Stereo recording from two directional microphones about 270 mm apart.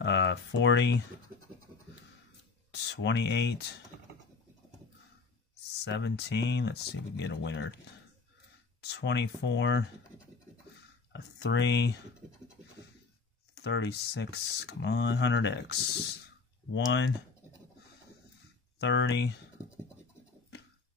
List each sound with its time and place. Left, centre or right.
0.0 s speech: left
2.7 s speech: left
5.6 s speech: left
8.8 s speech: left
11.1 s speech: left
13.6 s speech: left
18.8 s speech: left